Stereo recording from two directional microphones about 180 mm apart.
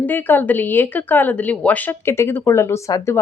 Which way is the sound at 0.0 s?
10° left (ahead or behind).